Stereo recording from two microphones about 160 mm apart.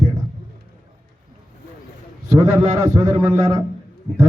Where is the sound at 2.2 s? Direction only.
20° right (ahead or behind).